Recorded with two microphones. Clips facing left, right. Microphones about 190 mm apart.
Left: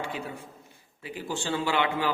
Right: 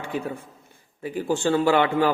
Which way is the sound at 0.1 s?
50° right (ahead or behind).